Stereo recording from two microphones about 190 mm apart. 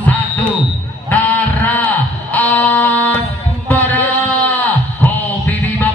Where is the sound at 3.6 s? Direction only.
10° left (ahead or behind).